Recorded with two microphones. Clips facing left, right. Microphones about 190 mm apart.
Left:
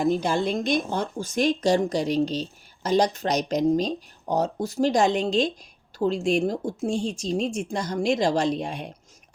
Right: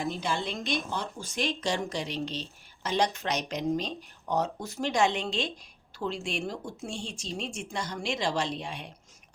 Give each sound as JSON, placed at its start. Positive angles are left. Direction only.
{"t": 0.0, "sound": "speech", "side_deg": 45}